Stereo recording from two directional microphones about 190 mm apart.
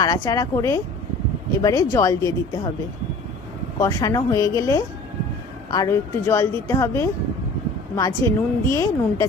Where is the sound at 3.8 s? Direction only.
15° left (ahead or behind).